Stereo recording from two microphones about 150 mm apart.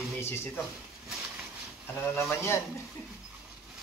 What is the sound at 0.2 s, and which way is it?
Speech, 15° left (ahead or behind).